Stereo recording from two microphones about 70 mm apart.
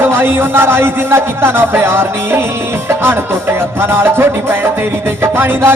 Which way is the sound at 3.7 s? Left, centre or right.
Right.